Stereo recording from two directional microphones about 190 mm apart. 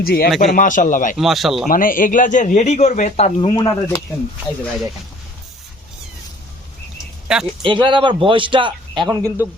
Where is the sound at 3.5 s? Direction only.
20° left (ahead or behind).